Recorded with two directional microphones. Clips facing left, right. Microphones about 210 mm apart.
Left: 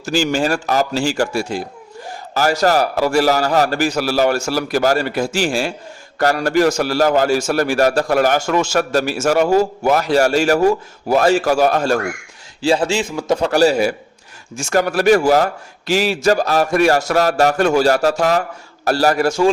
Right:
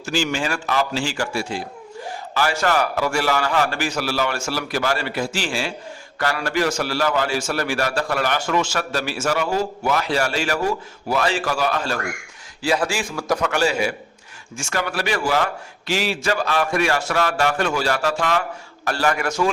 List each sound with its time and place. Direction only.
0.0 s a man's voice: 40° left (ahead or behind)
12.6 s a man's voice: 25° left (ahead or behind)
13.5 s a man's voice: 40° left (ahead or behind)